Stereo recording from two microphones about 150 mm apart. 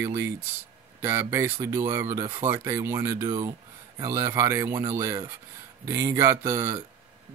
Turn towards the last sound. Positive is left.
turn(degrees=-15)  # may be behind; listen again after turning